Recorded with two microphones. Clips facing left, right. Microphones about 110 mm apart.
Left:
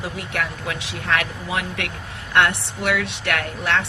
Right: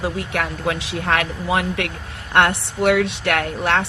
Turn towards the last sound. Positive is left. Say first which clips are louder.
# right 3 dB
turn(degrees=-40)  # may be behind; listen again after turning